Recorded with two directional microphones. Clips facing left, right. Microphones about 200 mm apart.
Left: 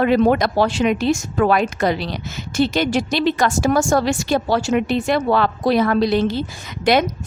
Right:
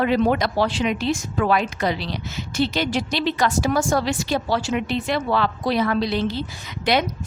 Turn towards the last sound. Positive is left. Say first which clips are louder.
# left 4 dB
turn(degrees=50)  # may be behind; listen again after turning